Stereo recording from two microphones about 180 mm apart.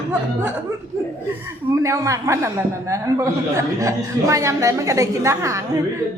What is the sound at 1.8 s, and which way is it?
A man's voice, 15° right (ahead or behind).